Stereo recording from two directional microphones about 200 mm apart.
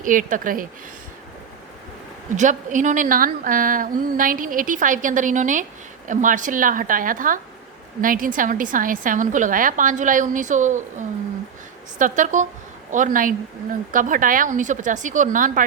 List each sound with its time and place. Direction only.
0.0 s a woman's voice: 40° right (ahead or behind)
2.3 s a woman's voice: 40° right (ahead or behind)